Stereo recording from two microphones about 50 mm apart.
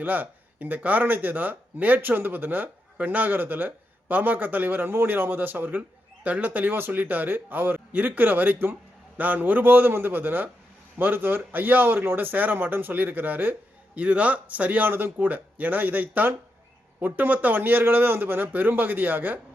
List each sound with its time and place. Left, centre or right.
0.0 s speech: right